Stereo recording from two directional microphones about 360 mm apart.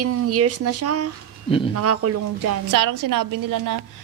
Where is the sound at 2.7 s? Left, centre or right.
Right.